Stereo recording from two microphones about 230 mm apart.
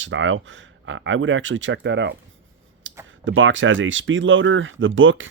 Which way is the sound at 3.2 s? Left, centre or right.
Right.